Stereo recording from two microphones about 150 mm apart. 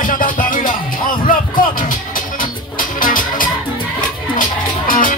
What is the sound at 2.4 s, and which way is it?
Music, 65° left (ahead or behind).